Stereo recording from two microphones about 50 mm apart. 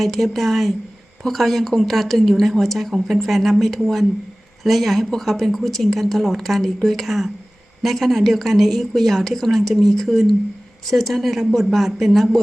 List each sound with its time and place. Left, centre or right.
0.0 s speech: centre